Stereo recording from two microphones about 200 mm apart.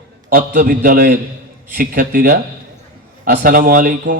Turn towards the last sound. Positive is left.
turn(degrees=-45)  # may be behind; listen again after turning